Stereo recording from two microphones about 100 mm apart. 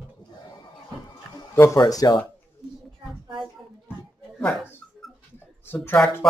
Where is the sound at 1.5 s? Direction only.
30° left (ahead or behind).